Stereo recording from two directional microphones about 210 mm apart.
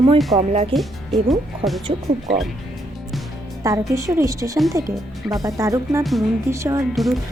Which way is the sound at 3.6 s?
15° right (ahead or behind).